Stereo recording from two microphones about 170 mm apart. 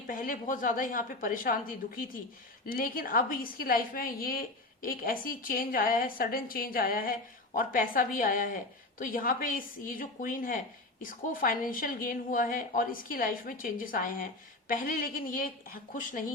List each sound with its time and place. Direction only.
0.1 s a woman's voice: 50° left (ahead or behind)